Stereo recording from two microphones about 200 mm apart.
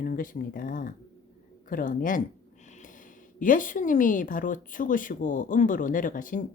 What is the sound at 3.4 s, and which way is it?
A woman's voice, 40° left (ahead or behind).